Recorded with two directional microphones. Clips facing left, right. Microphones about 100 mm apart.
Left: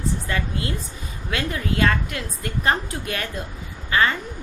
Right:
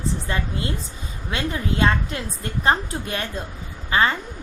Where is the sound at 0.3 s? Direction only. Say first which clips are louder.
Even; 25° right (ahead or behind).